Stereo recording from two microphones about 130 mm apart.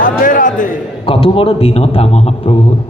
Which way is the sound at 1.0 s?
45° left (ahead or behind).